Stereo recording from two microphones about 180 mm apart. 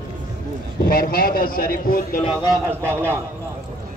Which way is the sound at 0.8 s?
55° left (ahead or behind).